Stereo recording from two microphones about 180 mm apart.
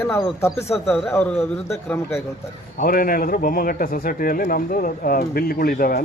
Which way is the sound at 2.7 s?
50° left (ahead or behind).